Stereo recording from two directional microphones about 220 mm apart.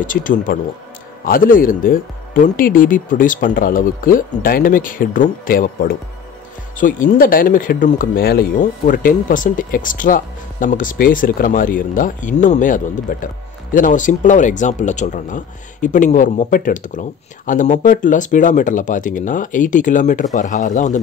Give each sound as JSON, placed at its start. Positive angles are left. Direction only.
{"t": 0.0, "sound": "speech", "side_deg": 35}